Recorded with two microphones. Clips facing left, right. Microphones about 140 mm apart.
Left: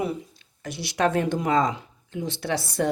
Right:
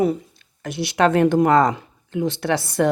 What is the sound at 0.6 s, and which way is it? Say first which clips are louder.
Speech: right 5 dB; 60° right (ahead or behind).